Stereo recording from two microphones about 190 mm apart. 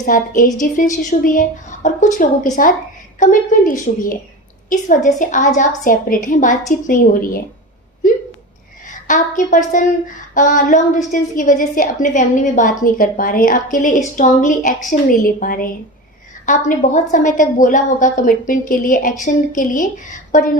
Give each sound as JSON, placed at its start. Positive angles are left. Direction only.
{"t": 0.0, "sound": "a woman's voice", "side_deg": 45}
{"t": 8.9, "sound": "a woman's voice", "side_deg": 40}